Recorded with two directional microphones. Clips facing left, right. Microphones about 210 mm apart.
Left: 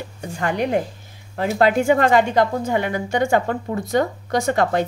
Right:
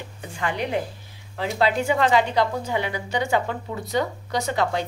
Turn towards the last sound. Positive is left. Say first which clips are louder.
# left 5 dB
turn(degrees=50)  # may be behind; listen again after turning